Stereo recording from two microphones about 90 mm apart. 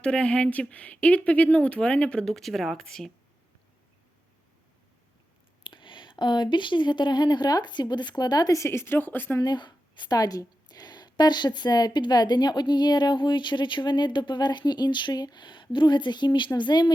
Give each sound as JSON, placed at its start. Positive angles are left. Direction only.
{"t": 0.0, "sound": "speech", "side_deg": 10}
{"t": 5.6, "sound": "a woman's voice", "side_deg": 65}
{"t": 9.4, "sound": "a woman's voice", "side_deg": 55}